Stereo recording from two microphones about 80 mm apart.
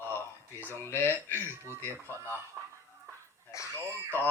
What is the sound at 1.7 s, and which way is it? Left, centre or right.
Speech, right.